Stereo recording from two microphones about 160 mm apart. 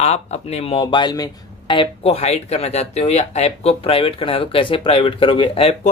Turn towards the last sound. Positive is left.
turn(degrees=35)  # may be behind; listen again after turning